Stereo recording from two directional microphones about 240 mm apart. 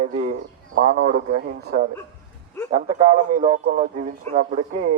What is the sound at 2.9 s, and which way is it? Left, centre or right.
A man's voice, right.